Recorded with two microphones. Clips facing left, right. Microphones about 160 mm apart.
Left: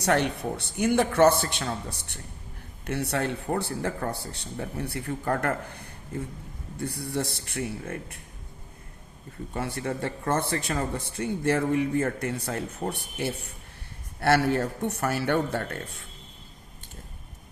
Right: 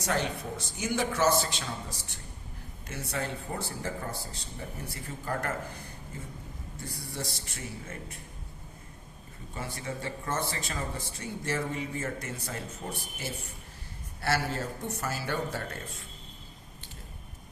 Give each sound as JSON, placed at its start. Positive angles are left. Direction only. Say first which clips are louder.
{"t": 0.0, "sound": "speech", "louder": "left 6 dB", "side_deg": 65}
{"t": 9.5, "sound": "speech", "louder": "left 7 dB", "side_deg": 60}